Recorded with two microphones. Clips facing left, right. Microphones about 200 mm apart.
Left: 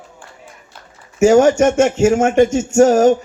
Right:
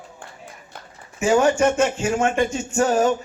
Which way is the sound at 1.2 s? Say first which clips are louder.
Left 7 dB; 45° left (ahead or behind).